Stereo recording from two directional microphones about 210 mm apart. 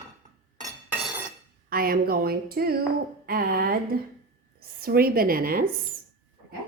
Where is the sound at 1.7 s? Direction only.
45° right (ahead or behind).